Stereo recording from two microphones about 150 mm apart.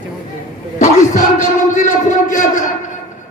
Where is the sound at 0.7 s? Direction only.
60° left (ahead or behind).